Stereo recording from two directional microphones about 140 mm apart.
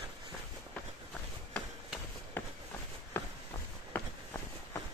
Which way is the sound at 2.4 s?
15° left (ahead or behind).